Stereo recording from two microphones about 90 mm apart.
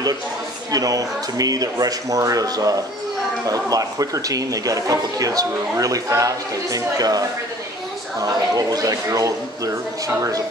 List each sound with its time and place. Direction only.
0.7 s speech: 40° right (ahead or behind)